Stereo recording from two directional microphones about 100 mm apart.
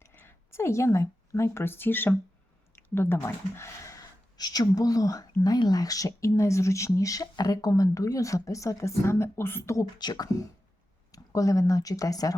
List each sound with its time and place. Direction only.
0.0 s speech: 25° left (ahead or behind)
10.0 s speech: 45° left (ahead or behind)